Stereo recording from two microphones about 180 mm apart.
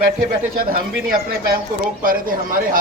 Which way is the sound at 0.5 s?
55° right (ahead or behind).